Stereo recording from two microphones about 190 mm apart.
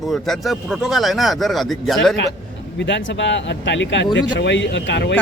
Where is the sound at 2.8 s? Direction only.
70° left (ahead or behind).